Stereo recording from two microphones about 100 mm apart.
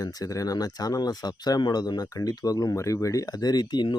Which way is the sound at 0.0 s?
40° left (ahead or behind).